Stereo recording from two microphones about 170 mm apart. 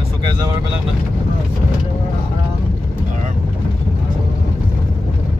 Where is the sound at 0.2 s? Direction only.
30° right (ahead or behind).